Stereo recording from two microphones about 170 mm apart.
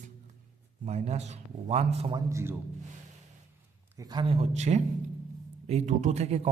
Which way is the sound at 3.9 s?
25° right (ahead or behind).